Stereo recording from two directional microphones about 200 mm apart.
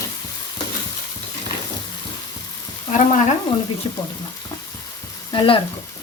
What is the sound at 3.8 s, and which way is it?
Speech, 25° left (ahead or behind).